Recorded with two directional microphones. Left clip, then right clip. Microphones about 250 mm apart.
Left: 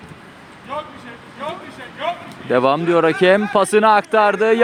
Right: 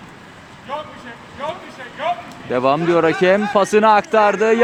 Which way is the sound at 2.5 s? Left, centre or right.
Centre.